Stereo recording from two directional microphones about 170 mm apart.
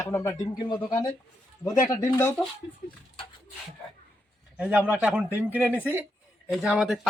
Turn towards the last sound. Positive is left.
turn(degrees=-5)  # may be behind; listen again after turning